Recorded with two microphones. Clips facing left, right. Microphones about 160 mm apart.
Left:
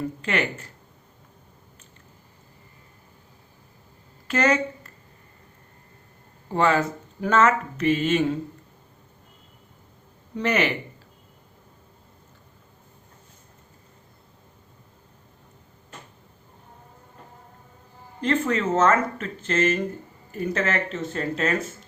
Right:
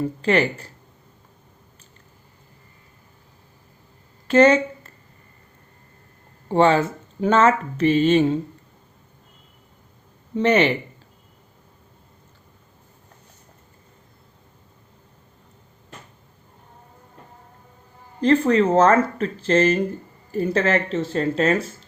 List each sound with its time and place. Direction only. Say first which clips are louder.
0.2 s speech: right 10 dB; 35° right (ahead or behind)
4.3 s speech: right 8 dB; 30° right (ahead or behind)
6.5 s speech: right 5 dB; 30° right (ahead or behind)
10.3 s speech: right 6 dB; 30° right (ahead or behind)
18.2 s speech: right 7 dB; 35° right (ahead or behind)